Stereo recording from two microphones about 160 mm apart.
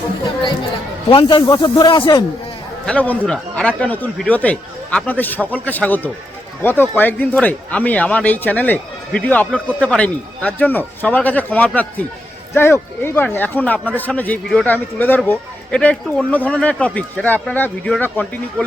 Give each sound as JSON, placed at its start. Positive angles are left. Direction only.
{"t": 1.1, "sound": "speech", "side_deg": 30}
{"t": 2.8, "sound": "speech", "side_deg": 10}